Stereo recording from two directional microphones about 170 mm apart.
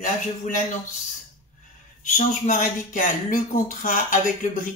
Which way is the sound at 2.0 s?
50° left (ahead or behind).